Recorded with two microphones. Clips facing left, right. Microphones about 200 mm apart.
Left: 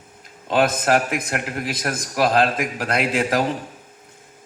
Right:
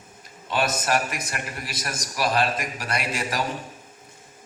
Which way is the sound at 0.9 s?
90° left.